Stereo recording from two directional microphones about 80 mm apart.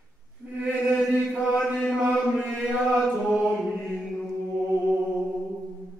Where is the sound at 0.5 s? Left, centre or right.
Centre.